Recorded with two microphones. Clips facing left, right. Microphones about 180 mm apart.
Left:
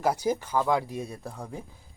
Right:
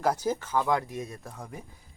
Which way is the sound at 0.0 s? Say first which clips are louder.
Left 1 dB; 10° left (ahead or behind).